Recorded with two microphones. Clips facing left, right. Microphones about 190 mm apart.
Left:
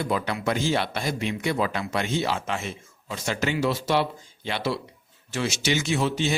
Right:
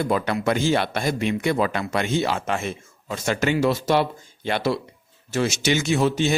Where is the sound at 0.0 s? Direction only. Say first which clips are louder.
Right 4 dB; 50° right (ahead or behind).